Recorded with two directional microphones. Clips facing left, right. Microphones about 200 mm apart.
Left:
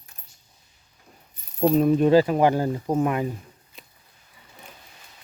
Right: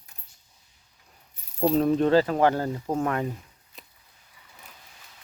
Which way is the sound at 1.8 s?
10° left (ahead or behind).